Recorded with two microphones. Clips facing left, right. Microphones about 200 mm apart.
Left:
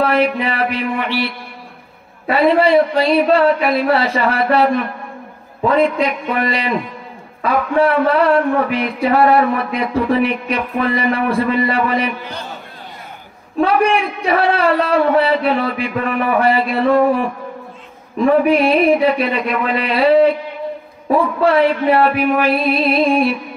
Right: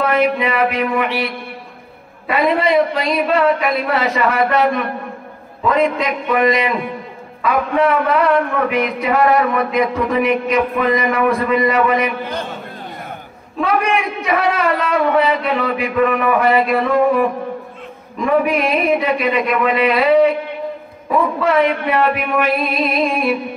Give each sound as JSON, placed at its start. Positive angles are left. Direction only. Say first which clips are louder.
{"t": 0.0, "sound": "a man's voice", "louder": "even", "side_deg": 30}
{"t": 13.6, "sound": "a man's voice", "louder": "left 3 dB", "side_deg": 30}
{"t": 18.1, "sound": "a man's voice", "louder": "left 3 dB", "side_deg": 30}
{"t": 21.5, "sound": "a man's voice", "louder": "left 4 dB", "side_deg": 30}